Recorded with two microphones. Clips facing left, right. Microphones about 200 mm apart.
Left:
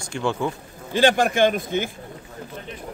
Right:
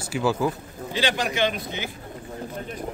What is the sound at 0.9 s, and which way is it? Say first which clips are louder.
Speech: left 7 dB; 50° left (ahead or behind).